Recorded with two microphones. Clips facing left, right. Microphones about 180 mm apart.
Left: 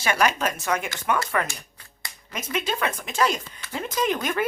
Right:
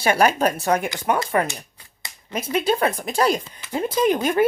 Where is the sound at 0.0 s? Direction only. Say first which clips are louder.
Right 5 dB; 35° right (ahead or behind).